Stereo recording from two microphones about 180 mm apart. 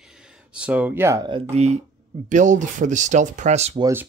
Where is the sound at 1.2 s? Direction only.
30° right (ahead or behind).